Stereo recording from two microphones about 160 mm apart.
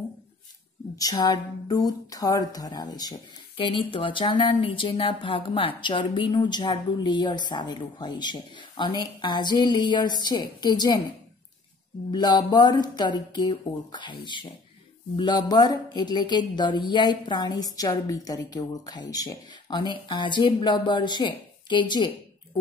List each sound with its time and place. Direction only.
0.9 s speech: 25° left (ahead or behind)
12.1 s speech: 25° left (ahead or behind)